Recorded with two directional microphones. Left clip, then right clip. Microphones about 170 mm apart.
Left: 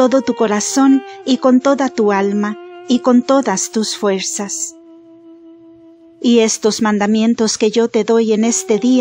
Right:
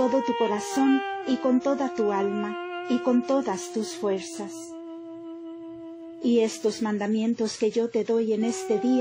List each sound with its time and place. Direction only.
0.0 s speech: 50° left (ahead or behind)
0.8 s speech: 5° left (ahead or behind)
1.2 s speech: 50° left (ahead or behind)
2.5 s music: 5° left (ahead or behind)
2.9 s speech: 50° left (ahead or behind)
6.2 s speech: 45° left (ahead or behind)